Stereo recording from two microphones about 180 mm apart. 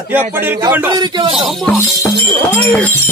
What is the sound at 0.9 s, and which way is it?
Speech, 25° right (ahead or behind).